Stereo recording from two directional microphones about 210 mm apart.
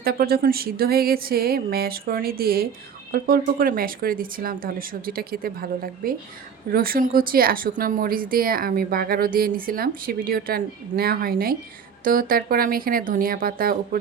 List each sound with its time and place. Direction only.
0.0 s a woman's voice: 45° right (ahead or behind)